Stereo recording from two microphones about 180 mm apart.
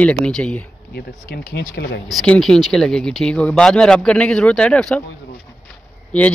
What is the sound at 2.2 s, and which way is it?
A man's voice, 5° left (ahead or behind).